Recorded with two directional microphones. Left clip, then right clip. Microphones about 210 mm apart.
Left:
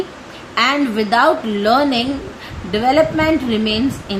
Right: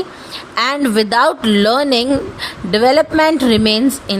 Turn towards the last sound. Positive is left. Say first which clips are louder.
# right 4 dB
turn(degrees=-55)  # may be behind; listen again after turning